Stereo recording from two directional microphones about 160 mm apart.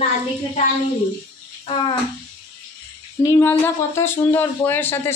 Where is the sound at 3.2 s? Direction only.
20° left (ahead or behind).